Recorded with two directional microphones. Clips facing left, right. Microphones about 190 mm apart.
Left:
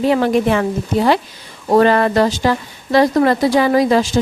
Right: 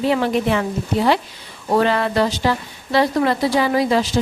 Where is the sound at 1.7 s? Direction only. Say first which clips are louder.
Left 5 dB; 45° left (ahead or behind).